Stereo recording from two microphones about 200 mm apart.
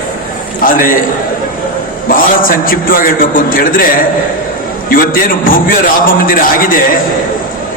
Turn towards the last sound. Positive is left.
turn(degrees=45)  # may be behind; listen again after turning